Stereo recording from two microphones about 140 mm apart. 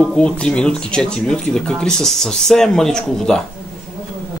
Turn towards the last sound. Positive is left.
turn(degrees=5)  # may be behind; listen again after turning